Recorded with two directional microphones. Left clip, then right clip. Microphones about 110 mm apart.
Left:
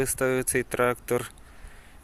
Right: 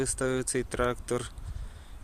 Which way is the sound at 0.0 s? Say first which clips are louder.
Left 4 dB; centre (ahead or behind).